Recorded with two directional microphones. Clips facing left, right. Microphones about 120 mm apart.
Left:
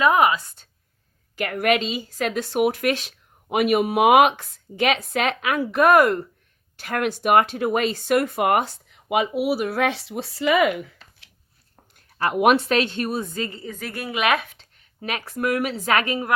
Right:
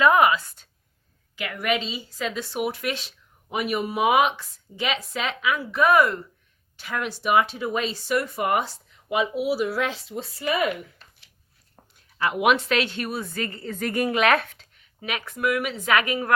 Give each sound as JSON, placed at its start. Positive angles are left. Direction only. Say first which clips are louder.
{"t": 0.0, "sound": "a woman's voice", "louder": "even", "side_deg": 25}
{"t": 1.4, "sound": "speech", "louder": "left 5 dB", "side_deg": 45}
{"t": 3.5, "sound": "speech", "louder": "left 7 dB", "side_deg": 70}
{"t": 11.9, "sound": "a sound", "louder": "left 3 dB", "side_deg": 50}
{"t": 12.6, "sound": "a woman's voice", "louder": "left 3 dB", "side_deg": 35}
{"t": 13.7, "sound": "a woman's voice", "louder": "right 6 dB", "side_deg": 5}
{"t": 14.5, "sound": "speech", "louder": "even", "side_deg": 30}